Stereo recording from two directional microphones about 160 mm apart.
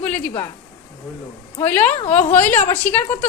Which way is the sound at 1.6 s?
10° left (ahead or behind).